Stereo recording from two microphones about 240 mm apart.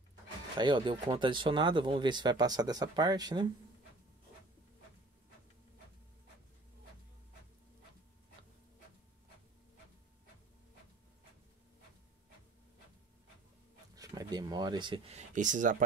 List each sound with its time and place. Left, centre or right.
0.6 s speech: centre
13.9 s speech: centre; by 15.8 s right